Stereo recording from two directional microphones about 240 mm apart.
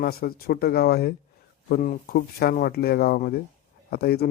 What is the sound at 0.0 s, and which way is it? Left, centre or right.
Speech, left.